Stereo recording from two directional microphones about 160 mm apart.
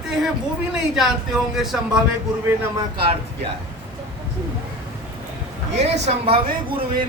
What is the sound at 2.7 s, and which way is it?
Speech, 30° right (ahead or behind).